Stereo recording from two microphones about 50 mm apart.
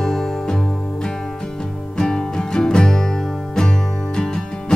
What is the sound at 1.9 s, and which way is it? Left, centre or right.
Music, centre.